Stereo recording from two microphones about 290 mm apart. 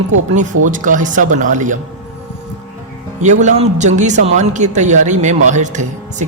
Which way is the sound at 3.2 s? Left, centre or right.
Right.